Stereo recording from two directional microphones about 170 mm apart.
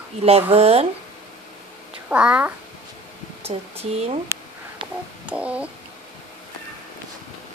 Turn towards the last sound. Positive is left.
turn(degrees=-5)  # may be behind; listen again after turning